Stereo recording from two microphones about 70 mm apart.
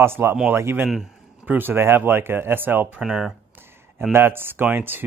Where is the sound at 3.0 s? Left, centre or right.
Centre.